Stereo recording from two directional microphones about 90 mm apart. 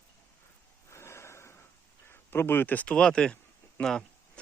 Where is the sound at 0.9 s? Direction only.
30° left (ahead or behind).